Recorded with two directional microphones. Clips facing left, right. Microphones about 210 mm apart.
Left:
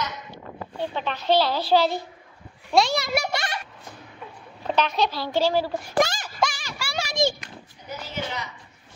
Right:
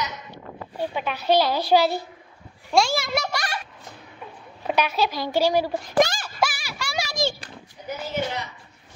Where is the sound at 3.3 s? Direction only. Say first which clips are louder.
Left 1 dB; 25° left (ahead or behind).